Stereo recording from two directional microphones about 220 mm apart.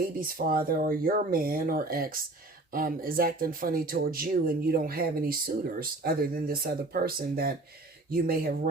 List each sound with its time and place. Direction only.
0.0 s speech: 40° right (ahead or behind)